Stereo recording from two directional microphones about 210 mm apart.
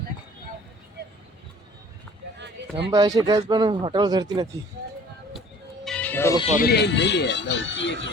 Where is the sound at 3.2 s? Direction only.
15° right (ahead or behind).